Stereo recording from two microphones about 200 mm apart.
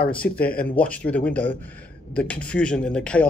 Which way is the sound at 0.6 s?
5° left (ahead or behind).